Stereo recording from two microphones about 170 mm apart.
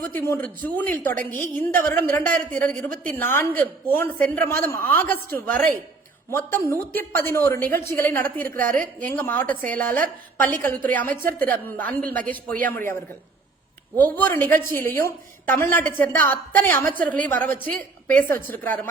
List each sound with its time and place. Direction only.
0.1 s a woman's voice: 15° left (ahead or behind)
8.4 s a woman's voice: 55° right (ahead or behind)
9.0 s a woman's voice: 10° left (ahead or behind)